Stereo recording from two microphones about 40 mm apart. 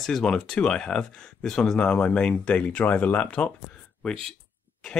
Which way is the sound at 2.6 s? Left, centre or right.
Left.